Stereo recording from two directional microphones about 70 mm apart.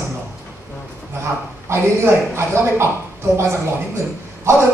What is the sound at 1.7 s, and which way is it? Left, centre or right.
A woman's voice, right.